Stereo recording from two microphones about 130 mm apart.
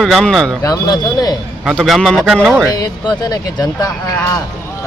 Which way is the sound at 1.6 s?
Centre (ahead or behind).